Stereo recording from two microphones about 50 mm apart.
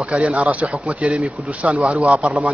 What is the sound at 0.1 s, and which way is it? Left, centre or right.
A man's voice, right.